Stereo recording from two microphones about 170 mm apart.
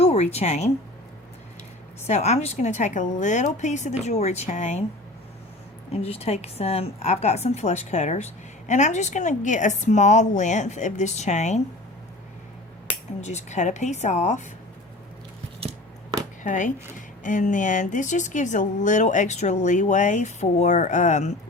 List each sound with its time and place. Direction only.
0.0 s speech: 40° left (ahead or behind)
2.0 s a woman's voice: 40° left (ahead or behind)
5.9 s a woman's voice: 35° left (ahead or behind)
13.2 s a woman's voice: 45° left (ahead or behind)
15.6 s scissors: 35° right (ahead or behind)
16.4 s a woman's voice: 50° left (ahead or behind)